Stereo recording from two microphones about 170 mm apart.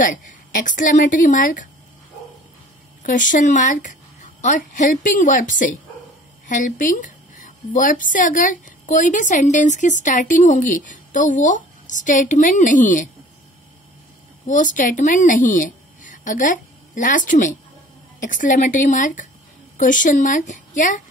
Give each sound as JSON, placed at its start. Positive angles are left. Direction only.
{"t": 0.0, "sound": "a woman's voice", "side_deg": 50}
{"t": 3.0, "sound": "a woman's voice", "side_deg": 50}
{"t": 14.5, "sound": "a woman's voice", "side_deg": 50}